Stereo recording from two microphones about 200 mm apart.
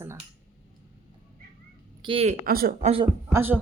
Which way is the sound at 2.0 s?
25° right (ahead or behind).